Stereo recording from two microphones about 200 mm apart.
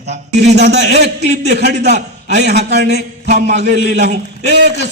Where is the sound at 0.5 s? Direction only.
55° right (ahead or behind).